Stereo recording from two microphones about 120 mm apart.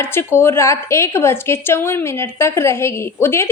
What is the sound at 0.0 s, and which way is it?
A woman's voice, 20° left (ahead or behind).